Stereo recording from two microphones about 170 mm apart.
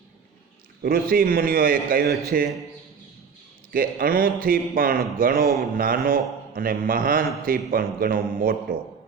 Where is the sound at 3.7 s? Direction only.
55° right (ahead or behind).